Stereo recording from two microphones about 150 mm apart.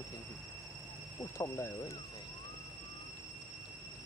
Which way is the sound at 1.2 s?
15° left (ahead or behind).